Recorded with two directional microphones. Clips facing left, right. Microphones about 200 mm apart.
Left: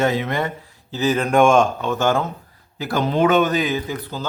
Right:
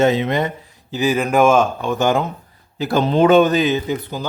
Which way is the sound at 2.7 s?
25° right (ahead or behind).